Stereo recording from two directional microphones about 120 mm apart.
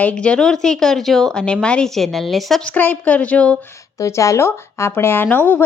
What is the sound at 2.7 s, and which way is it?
Speech, 15° left (ahead or behind).